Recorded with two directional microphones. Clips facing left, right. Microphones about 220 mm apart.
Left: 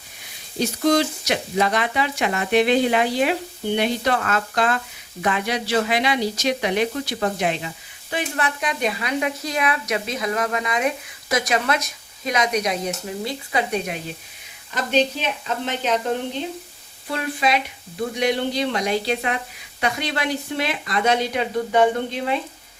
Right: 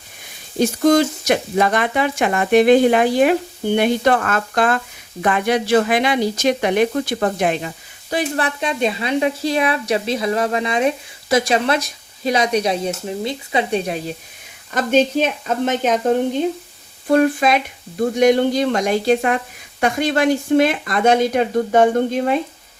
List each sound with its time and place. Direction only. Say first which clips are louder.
0.6 s speech: right 5 dB; 50° right (ahead or behind)
8.1 s a woman's voice: right 5 dB; 30° right (ahead or behind)
14.7 s speech: right 5 dB; 50° right (ahead or behind)
17.1 s speech: right 8 dB; 50° right (ahead or behind)